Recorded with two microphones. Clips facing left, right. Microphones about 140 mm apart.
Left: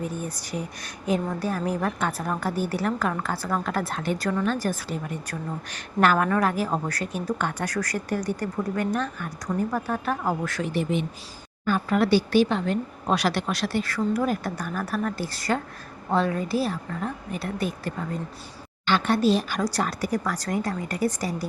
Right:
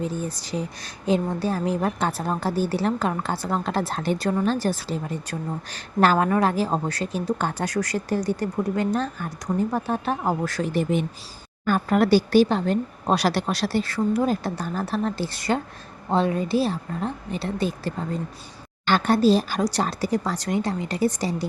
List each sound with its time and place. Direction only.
0.0 s a woman's voice: 30° right (ahead or behind)
18.9 s a woman's voice: 40° right (ahead or behind); by 21.4 s 25° right (ahead or behind)